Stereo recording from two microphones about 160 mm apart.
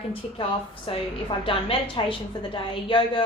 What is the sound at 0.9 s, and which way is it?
A woman's voice, 35° left (ahead or behind).